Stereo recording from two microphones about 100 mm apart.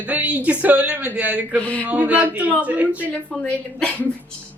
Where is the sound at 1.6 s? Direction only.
15° left (ahead or behind).